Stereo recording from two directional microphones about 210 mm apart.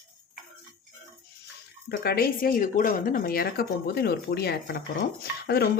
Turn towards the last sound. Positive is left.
turn(degrees=50)  # may be behind; listen again after turning